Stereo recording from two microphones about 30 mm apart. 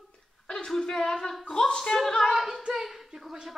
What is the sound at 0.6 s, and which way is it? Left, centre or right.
Speech, centre.